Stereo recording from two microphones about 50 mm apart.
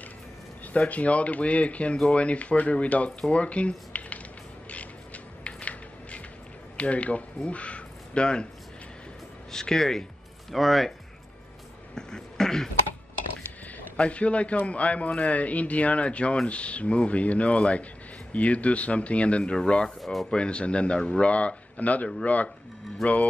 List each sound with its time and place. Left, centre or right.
0.7 s a man's voice: left
4.6 s a sound: left
6.8 s speech: left
9.5 s speech: centre
11.9 s beatboxing: centre
13.9 s a man's voice: left
20.0 s speech: centre
20.2 s a man's voice: centre